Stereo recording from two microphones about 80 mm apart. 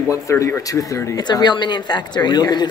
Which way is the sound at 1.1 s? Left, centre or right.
Left.